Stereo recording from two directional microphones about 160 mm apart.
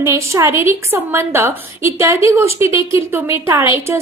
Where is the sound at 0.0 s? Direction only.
15° right (ahead or behind).